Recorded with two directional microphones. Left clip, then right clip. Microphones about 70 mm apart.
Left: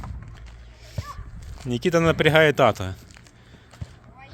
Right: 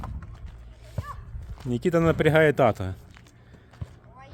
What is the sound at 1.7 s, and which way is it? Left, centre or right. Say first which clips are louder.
Speech: left 2 dB; right.